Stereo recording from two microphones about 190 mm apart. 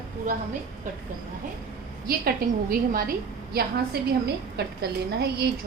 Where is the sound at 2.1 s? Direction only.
50° right (ahead or behind).